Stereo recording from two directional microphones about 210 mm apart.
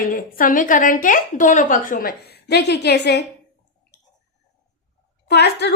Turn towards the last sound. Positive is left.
turn(degrees=50)  # may be behind; listen again after turning